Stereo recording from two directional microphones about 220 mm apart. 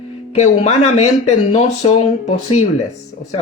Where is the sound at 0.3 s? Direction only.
30° left (ahead or behind).